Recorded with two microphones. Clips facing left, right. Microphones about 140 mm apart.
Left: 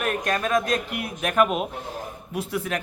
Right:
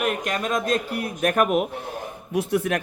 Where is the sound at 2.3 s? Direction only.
60° right (ahead or behind).